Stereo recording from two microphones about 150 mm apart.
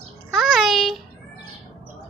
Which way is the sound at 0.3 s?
Centre (ahead or behind).